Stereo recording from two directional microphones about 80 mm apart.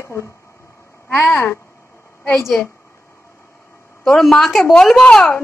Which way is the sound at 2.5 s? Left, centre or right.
Centre.